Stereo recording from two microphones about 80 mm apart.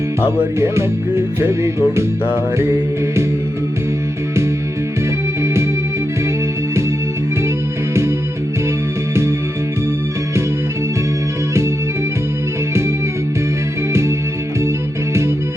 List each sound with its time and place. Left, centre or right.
0.6 s music: right